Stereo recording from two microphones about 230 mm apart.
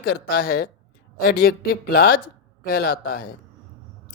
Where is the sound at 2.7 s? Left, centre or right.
Left.